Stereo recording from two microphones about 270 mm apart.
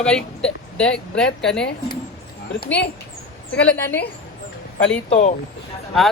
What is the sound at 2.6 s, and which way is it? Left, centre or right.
Speech, left.